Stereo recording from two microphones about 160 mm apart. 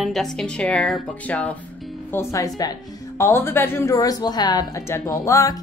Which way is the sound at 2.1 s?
20° left (ahead or behind).